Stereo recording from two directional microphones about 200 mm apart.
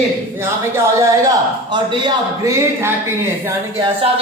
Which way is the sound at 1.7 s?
20° right (ahead or behind).